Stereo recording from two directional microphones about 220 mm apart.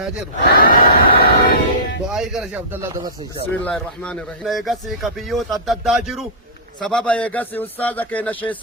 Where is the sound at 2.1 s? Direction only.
Centre (ahead or behind).